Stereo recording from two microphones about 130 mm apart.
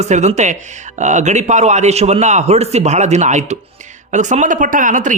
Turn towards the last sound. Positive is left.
turn(degrees=-75)  # may be behind; listen again after turning